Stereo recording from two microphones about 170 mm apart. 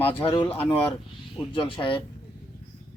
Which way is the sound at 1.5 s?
30° left (ahead or behind).